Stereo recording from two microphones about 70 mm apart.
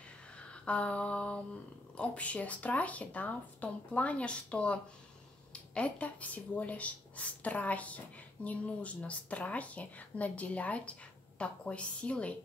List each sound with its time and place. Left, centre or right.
0.4 s speech: centre